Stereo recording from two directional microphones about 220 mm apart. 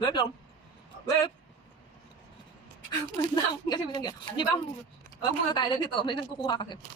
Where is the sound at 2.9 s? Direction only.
20° left (ahead or behind).